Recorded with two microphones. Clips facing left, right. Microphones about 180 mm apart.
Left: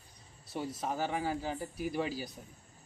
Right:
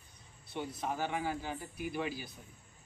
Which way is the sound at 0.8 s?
35° left (ahead or behind).